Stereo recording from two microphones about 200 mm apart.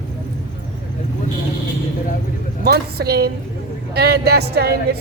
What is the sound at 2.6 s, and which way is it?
Speech, 50° right (ahead or behind).